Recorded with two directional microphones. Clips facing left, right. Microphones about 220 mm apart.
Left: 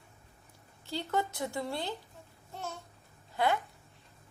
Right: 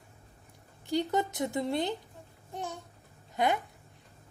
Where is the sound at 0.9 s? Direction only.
15° right (ahead or behind).